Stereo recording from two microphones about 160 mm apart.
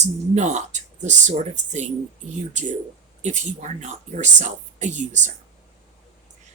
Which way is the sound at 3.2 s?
45° right (ahead or behind).